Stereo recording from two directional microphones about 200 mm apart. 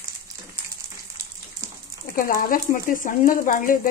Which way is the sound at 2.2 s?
45° left (ahead or behind).